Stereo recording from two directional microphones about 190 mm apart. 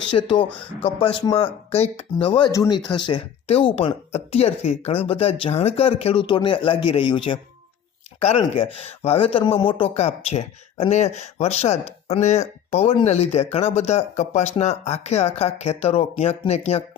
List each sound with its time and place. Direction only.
0.1 s speech: 25° left (ahead or behind)